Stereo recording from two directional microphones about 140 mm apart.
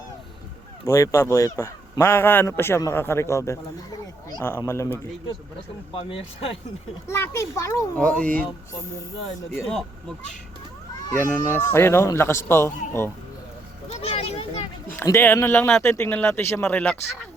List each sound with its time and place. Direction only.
0.9 s speech: 20° left (ahead or behind)
5.9 s speech: 40° left (ahead or behind)
7.1 s speech: 20° left (ahead or behind)
7.9 s speech: 10° left (ahead or behind)
11.2 s speech: 15° left (ahead or behind)
13.8 s a sound: 50° left (ahead or behind)
14.9 s speech: 20° left (ahead or behind)